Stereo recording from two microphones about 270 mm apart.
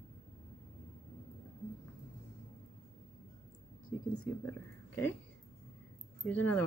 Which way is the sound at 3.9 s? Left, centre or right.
Centre.